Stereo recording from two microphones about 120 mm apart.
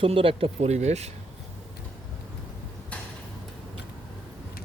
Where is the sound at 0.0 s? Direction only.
50° right (ahead or behind).